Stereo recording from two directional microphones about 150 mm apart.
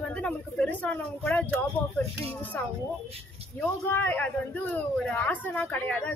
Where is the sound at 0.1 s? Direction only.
10° left (ahead or behind).